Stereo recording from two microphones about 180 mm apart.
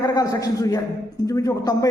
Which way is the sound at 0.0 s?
20° left (ahead or behind).